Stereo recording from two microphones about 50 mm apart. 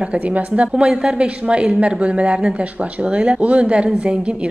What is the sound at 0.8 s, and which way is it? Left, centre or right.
Speech, centre.